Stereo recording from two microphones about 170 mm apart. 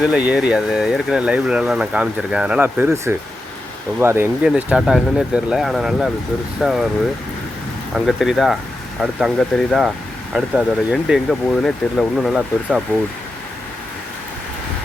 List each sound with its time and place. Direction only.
0.0 s speech: 5° right (ahead or behind)
7.9 s speech: centre (ahead or behind)